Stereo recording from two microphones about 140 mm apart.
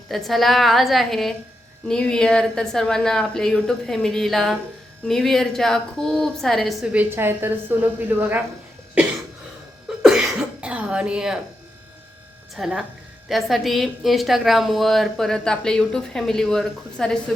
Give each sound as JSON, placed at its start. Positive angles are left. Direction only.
{"t": 0.1, "sound": "a woman's voice", "side_deg": 0}
{"t": 6.9, "sound": "a woman's voice", "side_deg": -15}
{"t": 10.0, "sound": "cough", "side_deg": -5}
{"t": 12.5, "sound": "a woman's voice", "side_deg": 0}